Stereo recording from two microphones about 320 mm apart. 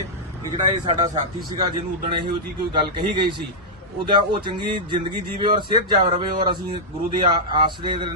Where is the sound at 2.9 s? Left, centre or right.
Centre.